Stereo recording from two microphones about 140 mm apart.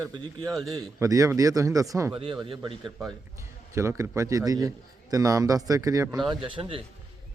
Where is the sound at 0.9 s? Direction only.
25° right (ahead or behind).